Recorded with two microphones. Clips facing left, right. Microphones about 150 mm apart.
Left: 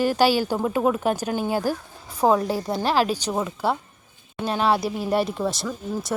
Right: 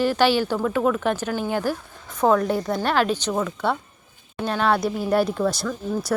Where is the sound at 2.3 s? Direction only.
20° left (ahead or behind).